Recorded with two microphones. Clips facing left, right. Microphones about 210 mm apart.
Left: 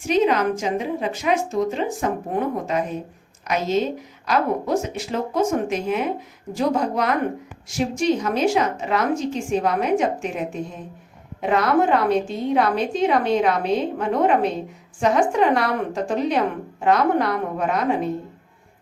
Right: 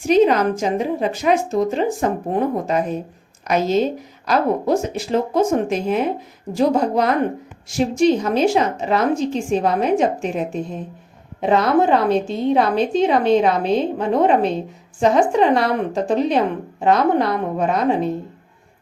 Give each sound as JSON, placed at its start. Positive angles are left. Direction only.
{"t": 0.1, "sound": "a woman's voice", "side_deg": -35}